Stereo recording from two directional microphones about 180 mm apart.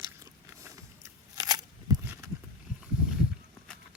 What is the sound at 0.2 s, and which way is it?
Biting, 15° right (ahead or behind).